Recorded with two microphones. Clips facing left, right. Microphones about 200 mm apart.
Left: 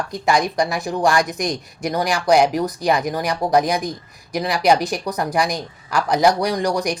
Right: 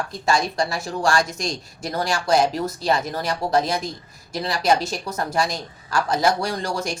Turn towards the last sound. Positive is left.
turn(degrees=15)  # may be behind; listen again after turning